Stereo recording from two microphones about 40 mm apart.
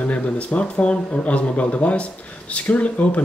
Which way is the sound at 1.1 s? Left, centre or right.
Left.